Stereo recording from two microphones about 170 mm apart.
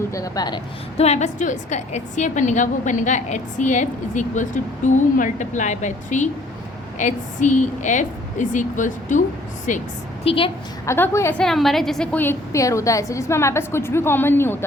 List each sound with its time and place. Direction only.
0.1 s speech: 20° left (ahead or behind)
0.9 s a woman's voice: 40° left (ahead or behind)
10.2 s a woman's voice: 30° left (ahead or behind)
10.8 s a woman's voice: 15° left (ahead or behind)